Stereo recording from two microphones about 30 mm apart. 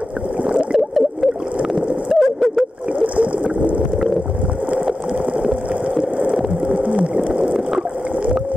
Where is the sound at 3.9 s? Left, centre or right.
Centre.